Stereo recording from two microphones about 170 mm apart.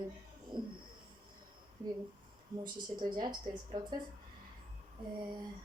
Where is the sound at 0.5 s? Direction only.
25° right (ahead or behind).